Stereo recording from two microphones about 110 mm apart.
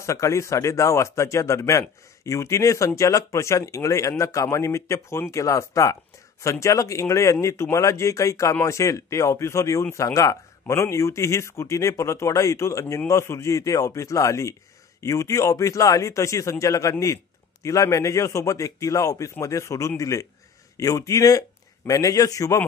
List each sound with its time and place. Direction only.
0.0 s a man's voice: 25° left (ahead or behind)